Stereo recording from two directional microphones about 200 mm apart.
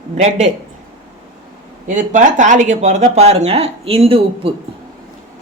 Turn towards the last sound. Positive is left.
turn(degrees=-30)  # may be behind; listen again after turning